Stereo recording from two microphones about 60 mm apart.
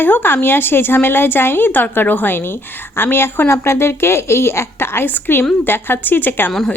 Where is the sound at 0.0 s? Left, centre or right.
Left.